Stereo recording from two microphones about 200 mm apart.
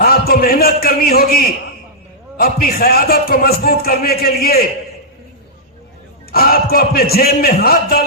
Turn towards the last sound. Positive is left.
turn(degrees=50)  # may be behind; listen again after turning